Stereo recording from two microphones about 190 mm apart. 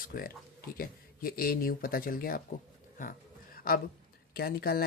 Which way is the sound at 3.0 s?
50° left (ahead or behind).